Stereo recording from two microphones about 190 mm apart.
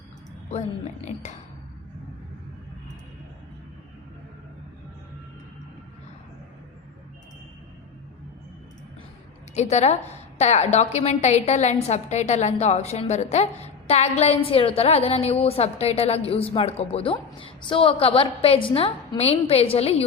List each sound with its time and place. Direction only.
1.0 s a woman's voice: 35° left (ahead or behind)
9.6 s a woman's voice: 35° left (ahead or behind)